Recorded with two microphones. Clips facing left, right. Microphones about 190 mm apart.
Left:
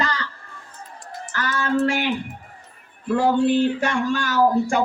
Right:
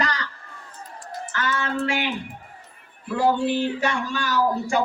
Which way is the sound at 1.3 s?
40° left (ahead or behind).